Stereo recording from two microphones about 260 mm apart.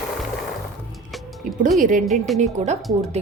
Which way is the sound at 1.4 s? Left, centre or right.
Right.